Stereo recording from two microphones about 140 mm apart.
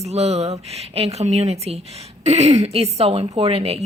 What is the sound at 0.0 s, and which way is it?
A woman's voice, 50° right (ahead or behind).